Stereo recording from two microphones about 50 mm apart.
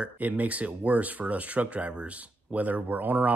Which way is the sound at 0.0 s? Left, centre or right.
Right.